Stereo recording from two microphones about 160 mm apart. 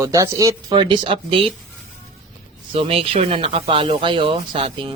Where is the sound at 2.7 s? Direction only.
35° right (ahead or behind).